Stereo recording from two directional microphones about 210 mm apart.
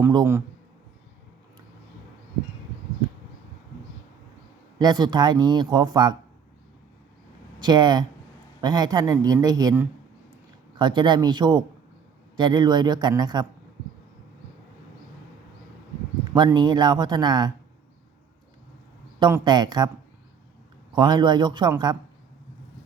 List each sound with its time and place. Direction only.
0.0 s a man's voice: 15° right (ahead or behind)
4.8 s speech: 20° right (ahead or behind)
7.6 s speech: 20° right (ahead or behind)
16.3 s speech: 20° right (ahead or behind)
19.2 s speech: 20° right (ahead or behind)
20.9 s speech: 20° right (ahead or behind)